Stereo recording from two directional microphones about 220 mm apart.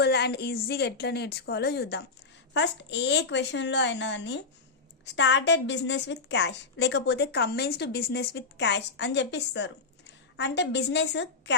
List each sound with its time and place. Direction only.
0.0 s a woman's voice: 45° left (ahead or behind)